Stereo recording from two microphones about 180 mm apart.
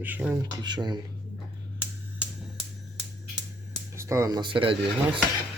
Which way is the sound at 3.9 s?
15° right (ahead or behind).